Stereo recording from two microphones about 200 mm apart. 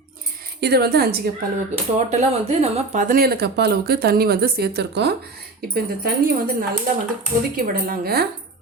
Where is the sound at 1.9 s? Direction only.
35° right (ahead or behind); by 6.1 s 50° right (ahead or behind).